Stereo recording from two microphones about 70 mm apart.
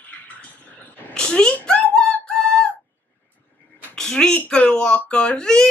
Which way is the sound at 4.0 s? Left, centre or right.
Centre.